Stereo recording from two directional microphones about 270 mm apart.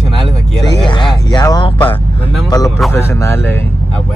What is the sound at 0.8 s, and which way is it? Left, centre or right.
Speech, centre.